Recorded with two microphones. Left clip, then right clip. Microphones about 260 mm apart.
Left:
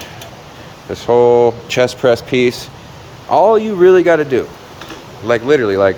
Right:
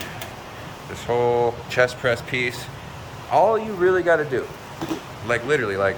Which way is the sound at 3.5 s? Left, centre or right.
Left.